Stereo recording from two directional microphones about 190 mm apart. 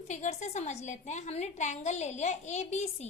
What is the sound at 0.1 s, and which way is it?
A woman's voice, 40° left (ahead or behind).